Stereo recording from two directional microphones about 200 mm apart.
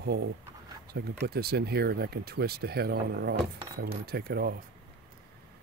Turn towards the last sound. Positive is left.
turn(degrees=-50)  # may be behind; listen again after turning